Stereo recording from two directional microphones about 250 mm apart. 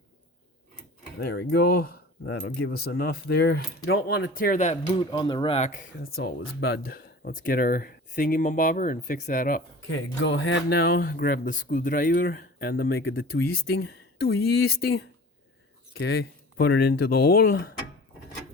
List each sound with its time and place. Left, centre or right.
1.2 s speech: left
5.1 s speech: centre
6.1 s speech: left
9.9 s speech: left